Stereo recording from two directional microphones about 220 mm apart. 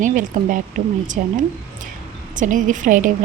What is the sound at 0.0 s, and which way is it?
A woman's voice, 35° right (ahead or behind).